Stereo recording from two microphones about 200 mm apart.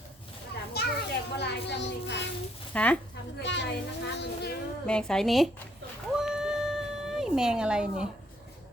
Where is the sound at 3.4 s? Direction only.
60° left (ahead or behind).